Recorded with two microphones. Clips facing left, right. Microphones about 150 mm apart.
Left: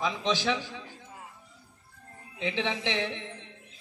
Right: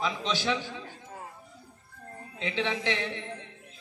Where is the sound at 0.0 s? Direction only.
15° left (ahead or behind).